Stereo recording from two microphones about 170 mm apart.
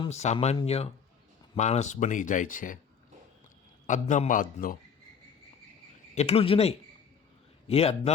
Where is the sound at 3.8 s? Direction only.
45° left (ahead or behind).